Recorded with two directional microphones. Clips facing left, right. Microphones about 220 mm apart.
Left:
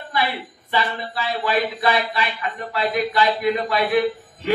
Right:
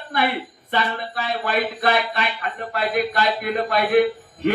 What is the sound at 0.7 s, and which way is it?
A man's voice, 50° right (ahead or behind).